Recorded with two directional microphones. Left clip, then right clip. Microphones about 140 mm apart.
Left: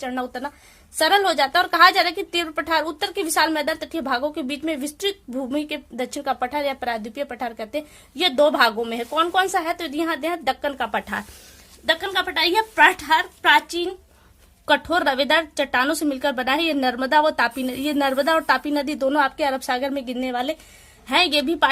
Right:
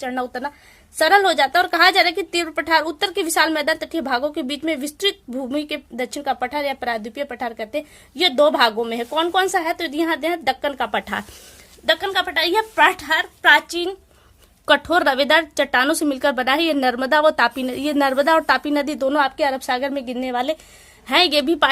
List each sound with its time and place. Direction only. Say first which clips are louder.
0.0 s a woman's voice: right 3 dB; 20° right (ahead or behind)
21.1 s speech: right 3 dB; 40° right (ahead or behind)